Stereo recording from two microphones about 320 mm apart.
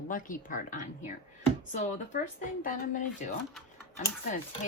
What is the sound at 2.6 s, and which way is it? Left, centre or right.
Speech, left.